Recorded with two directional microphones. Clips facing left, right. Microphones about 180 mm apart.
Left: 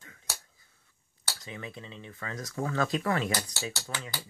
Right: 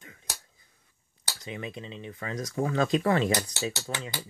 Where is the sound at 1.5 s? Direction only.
20° right (ahead or behind).